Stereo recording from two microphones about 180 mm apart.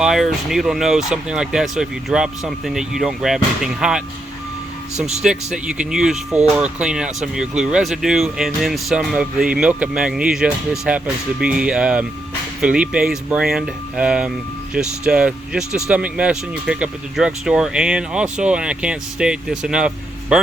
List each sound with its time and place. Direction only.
0.0 s speech: 5° right (ahead or behind)
4.9 s speech: 40° right (ahead or behind)
5.2 s speech: 5° right (ahead or behind)